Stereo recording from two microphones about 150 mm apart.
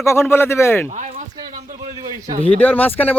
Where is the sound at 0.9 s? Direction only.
55° right (ahead or behind).